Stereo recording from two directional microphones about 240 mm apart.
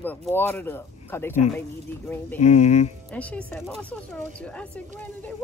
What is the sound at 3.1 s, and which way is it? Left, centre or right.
Speech, centre.